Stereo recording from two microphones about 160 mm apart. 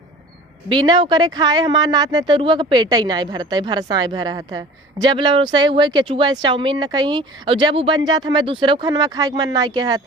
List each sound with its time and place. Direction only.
0.7 s speech: 30° right (ahead or behind)